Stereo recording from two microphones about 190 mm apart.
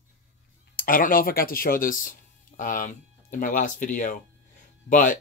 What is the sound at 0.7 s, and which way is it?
Speech, 45° left (ahead or behind).